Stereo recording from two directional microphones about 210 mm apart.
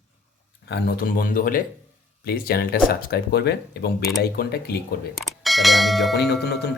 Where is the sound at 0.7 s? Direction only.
45° left (ahead or behind).